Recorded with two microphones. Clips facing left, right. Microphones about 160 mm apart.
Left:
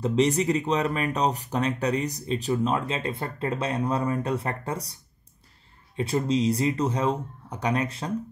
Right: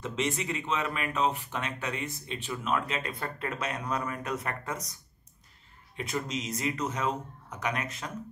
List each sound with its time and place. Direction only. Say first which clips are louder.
0.0 s speech: left 9 dB; 35° left (ahead or behind)
5.9 s speech: left 9 dB; 30° left (ahead or behind)